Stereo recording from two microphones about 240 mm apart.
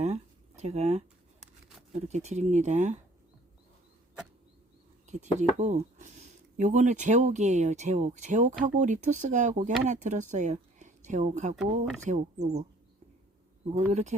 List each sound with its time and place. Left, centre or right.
0.6 s speech: right
5.0 s speech: right
13.7 s speech: right